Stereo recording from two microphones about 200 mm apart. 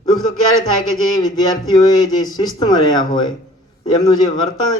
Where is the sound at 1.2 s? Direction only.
20° left (ahead or behind).